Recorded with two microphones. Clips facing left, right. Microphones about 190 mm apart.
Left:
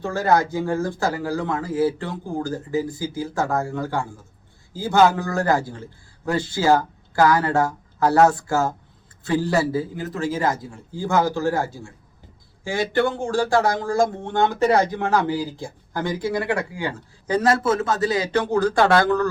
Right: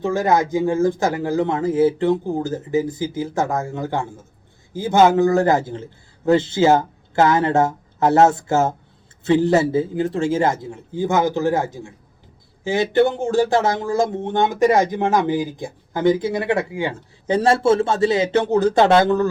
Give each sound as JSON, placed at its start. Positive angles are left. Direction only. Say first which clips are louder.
{"t": 0.0, "sound": "speech", "louder": "right 2 dB", "side_deg": -20}